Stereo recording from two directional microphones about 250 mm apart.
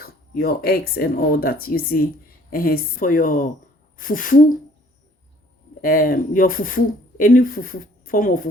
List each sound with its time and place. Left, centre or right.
0.0 s speech: left
5.8 s speech: left